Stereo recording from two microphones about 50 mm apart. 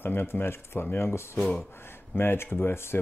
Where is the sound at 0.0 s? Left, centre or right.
Left.